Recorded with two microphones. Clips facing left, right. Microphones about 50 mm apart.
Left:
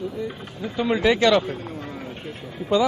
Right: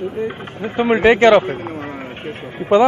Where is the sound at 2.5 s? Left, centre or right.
Right.